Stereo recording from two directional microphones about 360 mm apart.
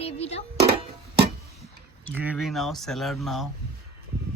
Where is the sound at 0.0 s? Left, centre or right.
Centre.